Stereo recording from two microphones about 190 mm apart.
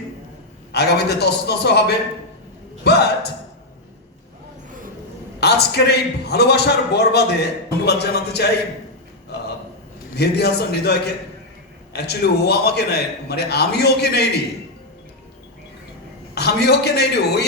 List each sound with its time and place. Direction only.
0.7 s a man's voice: 60° left (ahead or behind)
5.4 s a man's voice: 60° left (ahead or behind)
9.3 s a sound: 60° left (ahead or behind)
10.2 s a man's voice: 60° left (ahead or behind)
16.3 s a man's voice: 60° left (ahead or behind)